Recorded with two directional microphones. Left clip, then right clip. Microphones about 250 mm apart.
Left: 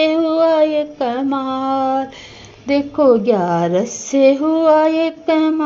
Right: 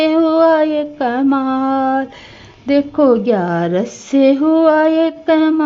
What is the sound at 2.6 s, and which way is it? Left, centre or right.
A woman's voice, right.